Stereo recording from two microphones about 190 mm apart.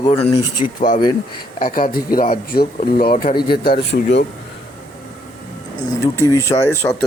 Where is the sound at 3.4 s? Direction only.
25° left (ahead or behind).